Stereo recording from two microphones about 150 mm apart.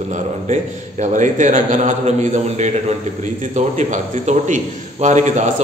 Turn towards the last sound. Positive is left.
turn(degrees=-55)  # may be behind; listen again after turning